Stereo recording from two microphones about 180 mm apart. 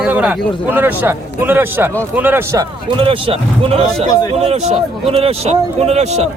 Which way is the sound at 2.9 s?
30° right (ahead or behind).